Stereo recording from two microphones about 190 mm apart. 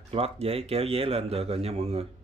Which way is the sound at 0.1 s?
30° right (ahead or behind).